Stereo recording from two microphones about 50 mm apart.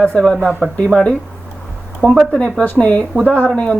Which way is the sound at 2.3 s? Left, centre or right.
Left.